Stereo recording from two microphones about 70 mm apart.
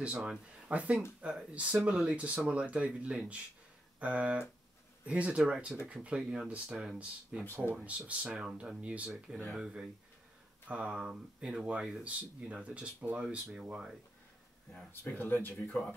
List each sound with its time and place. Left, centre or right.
0.0 s speech: centre
7.7 s speech: right
14.9 s speech: left